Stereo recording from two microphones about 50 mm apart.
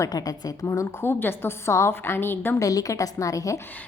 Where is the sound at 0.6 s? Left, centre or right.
Left.